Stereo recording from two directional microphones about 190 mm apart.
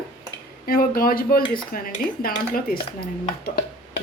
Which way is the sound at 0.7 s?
50° left (ahead or behind).